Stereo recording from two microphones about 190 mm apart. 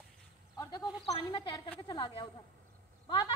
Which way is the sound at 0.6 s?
20° left (ahead or behind).